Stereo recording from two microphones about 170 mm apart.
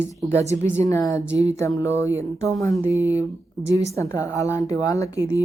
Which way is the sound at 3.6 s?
20° left (ahead or behind).